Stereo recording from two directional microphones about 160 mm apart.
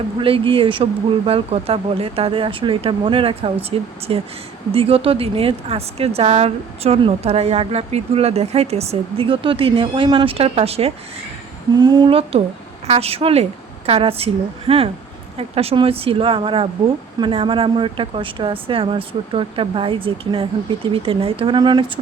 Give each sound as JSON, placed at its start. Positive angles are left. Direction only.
{"t": 0.2, "sound": "speech", "side_deg": -35}
{"t": 11.7, "sound": "a woman's voice", "side_deg": -25}